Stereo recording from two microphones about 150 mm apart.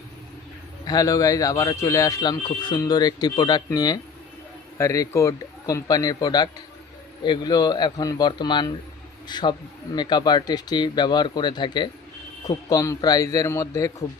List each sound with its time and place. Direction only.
0.9 s speech: 25° left (ahead or behind)